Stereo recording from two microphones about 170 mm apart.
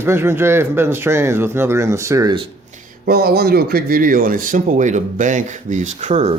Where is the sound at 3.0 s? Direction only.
65° right (ahead or behind).